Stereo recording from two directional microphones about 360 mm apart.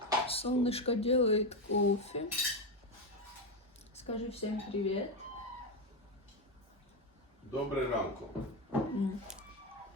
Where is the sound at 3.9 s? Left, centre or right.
Centre.